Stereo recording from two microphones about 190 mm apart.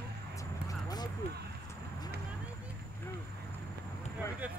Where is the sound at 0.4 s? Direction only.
20° left (ahead or behind).